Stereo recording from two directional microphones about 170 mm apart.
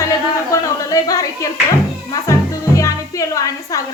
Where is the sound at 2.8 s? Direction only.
20° left (ahead or behind).